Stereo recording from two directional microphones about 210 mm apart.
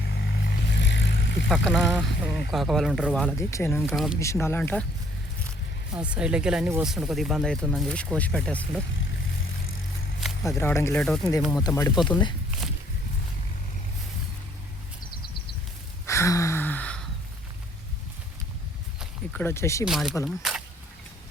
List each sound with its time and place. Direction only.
0.2 s vehicle: 50° left (ahead or behind)
1.5 s speech: centre (ahead or behind)
3.3 s speech: 10° left (ahead or behind)
3.9 s speech: centre (ahead or behind)
4.2 s speech: 15° left (ahead or behind)
5.9 s speech: 5° right (ahead or behind)
10.4 s speech: 10° left (ahead or behind)
11.5 s speech: 15° left (ahead or behind)
16.0 s gasp: 15° left (ahead or behind)
19.3 s speech: 10° left (ahead or behind)
19.8 s speech: centre (ahead or behind)